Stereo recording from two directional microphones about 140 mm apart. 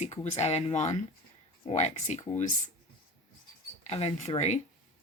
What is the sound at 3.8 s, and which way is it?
Speech, 50° left (ahead or behind).